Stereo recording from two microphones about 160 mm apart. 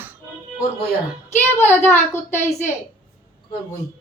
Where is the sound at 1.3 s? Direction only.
15° left (ahead or behind).